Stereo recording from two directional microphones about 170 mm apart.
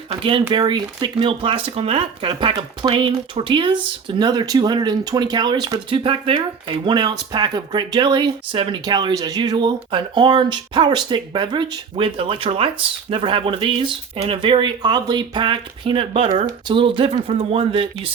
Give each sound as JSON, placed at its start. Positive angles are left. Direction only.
{"t": 0.1, "sound": "speech", "side_deg": -30}